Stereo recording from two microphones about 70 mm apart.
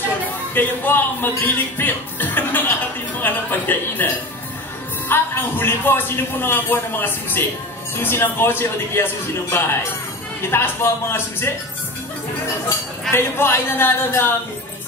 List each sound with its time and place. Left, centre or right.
0.6 s a man's voice: left
13.1 s a man's voice: left